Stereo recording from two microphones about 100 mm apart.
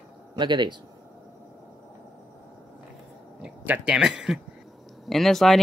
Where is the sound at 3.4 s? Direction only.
15° right (ahead or behind).